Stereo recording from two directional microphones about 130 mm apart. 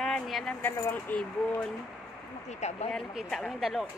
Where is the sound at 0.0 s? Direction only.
Centre (ahead or behind).